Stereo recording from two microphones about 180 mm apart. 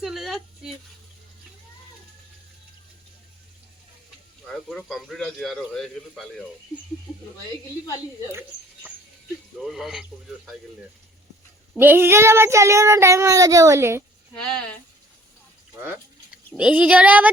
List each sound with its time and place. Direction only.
0.0 s speech: centre (ahead or behind)
4.5 s speech: centre (ahead or behind)
8.3 s speech: 15° right (ahead or behind)
9.6 s speech: centre (ahead or behind)
11.8 s child singing: 10° right (ahead or behind)
14.3 s speech: 5° left (ahead or behind)
16.6 s child singing: 5° right (ahead or behind)